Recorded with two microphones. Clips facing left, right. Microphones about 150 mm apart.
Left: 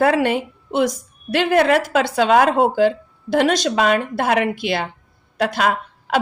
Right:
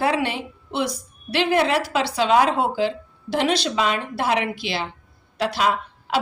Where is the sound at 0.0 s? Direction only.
50° left (ahead or behind).